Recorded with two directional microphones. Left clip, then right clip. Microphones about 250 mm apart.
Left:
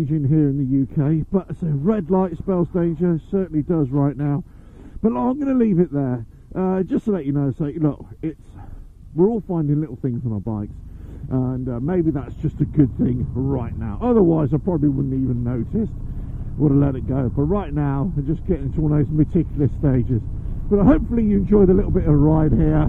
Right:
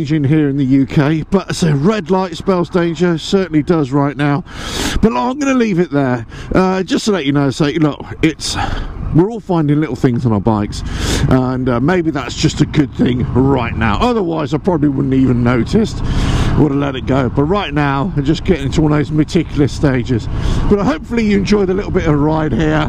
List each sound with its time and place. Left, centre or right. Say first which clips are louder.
0.0 s speech: right 6 dB; centre